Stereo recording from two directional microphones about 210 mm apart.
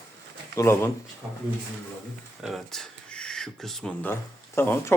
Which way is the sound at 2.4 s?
Centre (ahead or behind).